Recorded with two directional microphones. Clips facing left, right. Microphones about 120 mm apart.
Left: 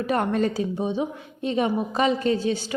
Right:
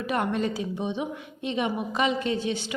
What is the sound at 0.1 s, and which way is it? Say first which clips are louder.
A woman's voice: left 3 dB; 40° left (ahead or behind).